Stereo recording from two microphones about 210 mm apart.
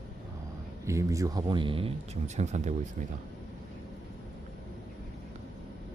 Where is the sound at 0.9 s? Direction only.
15° right (ahead or behind); by 2.7 s 35° right (ahead or behind).